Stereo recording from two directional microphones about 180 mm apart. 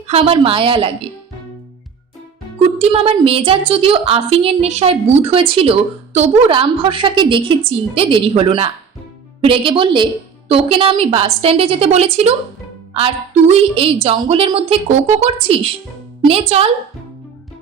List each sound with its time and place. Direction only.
0.1 s a woman's voice: 30° right (ahead or behind)
2.7 s a woman's voice: 30° right (ahead or behind)
13.5 s a woman's voice: 30° right (ahead or behind)